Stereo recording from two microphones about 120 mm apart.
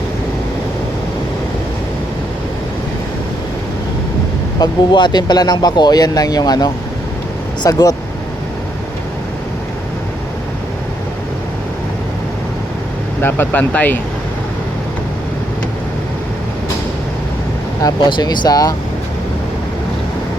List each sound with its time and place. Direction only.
4.6 s speech: 40° left (ahead or behind)
13.2 s speech: 15° left (ahead or behind)
17.8 s speech: 35° left (ahead or behind)